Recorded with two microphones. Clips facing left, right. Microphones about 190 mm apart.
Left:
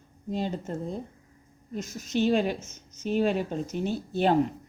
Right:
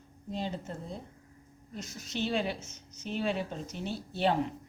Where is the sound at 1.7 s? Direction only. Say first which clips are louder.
Left 9 dB; 45° left (ahead or behind).